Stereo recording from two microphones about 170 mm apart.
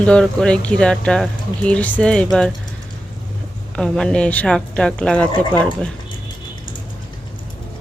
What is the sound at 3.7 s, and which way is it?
Speech, 5° left (ahead or behind).